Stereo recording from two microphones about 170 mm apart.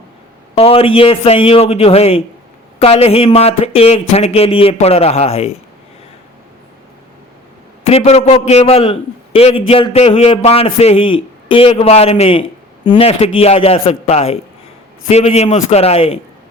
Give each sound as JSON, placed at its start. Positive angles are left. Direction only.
{"t": 0.5, "sound": "a man's voice", "side_deg": 35}
{"t": 7.9, "sound": "a man's voice", "side_deg": 40}